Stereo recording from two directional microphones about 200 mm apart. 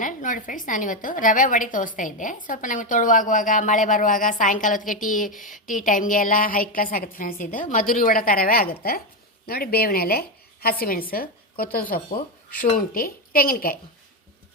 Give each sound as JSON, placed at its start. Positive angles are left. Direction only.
{"t": 0.0, "sound": "a woman's voice", "side_deg": 40}